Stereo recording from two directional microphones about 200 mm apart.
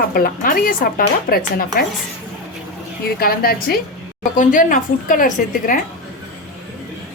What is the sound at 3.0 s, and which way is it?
A woman's voice, 50° left (ahead or behind).